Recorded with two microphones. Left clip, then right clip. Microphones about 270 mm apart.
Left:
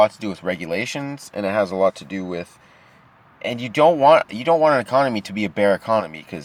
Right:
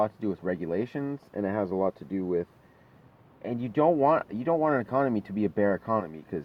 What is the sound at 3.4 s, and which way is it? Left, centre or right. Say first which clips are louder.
Speech: left 9 dB; left.